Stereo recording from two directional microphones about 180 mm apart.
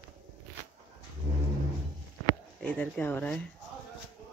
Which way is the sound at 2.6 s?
10° left (ahead or behind).